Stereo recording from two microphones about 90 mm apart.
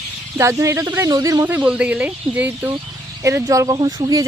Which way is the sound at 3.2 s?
35° right (ahead or behind).